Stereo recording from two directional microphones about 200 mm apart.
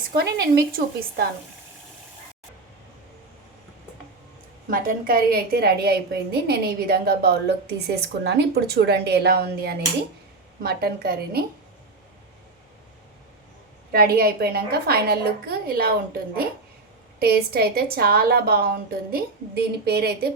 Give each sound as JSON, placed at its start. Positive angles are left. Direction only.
{"t": 0.3, "sound": "a woman's voice", "side_deg": -50}
{"t": 4.7, "sound": "a woman's voice", "side_deg": -45}
{"t": 13.9, "sound": "a woman's voice", "side_deg": -50}